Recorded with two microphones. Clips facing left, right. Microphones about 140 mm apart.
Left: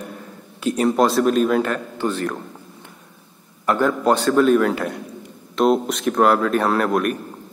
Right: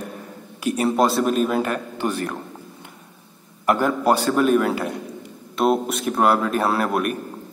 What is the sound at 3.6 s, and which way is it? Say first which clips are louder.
A man's voice: left 1 dB; 15° right (ahead or behind).